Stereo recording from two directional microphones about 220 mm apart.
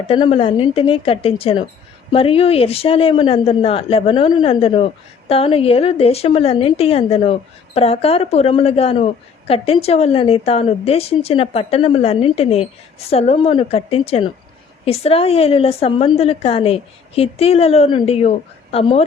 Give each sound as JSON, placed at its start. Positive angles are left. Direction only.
{"t": 0.1, "sound": "a woman's voice", "side_deg": 25}